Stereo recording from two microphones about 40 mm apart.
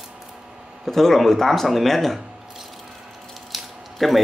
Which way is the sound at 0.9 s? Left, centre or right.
Centre.